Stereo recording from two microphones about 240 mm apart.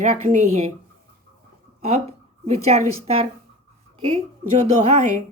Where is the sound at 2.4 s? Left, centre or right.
Right.